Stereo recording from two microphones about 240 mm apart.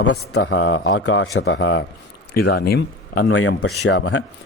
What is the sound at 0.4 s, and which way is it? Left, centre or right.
Speech, left.